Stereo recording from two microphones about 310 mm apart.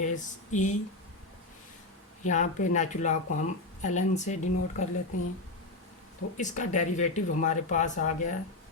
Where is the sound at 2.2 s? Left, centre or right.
Left.